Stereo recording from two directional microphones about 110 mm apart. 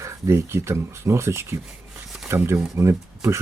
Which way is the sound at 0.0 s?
25° right (ahead or behind).